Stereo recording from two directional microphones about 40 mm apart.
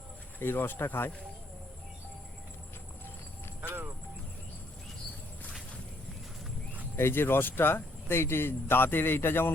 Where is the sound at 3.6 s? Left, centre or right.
Right.